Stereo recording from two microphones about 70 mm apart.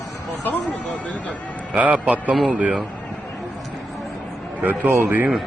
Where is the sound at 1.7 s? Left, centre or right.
Right.